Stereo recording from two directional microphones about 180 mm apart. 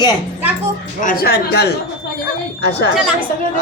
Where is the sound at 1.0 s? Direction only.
50° left (ahead or behind).